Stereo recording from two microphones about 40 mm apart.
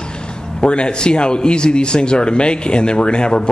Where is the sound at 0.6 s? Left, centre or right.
Left.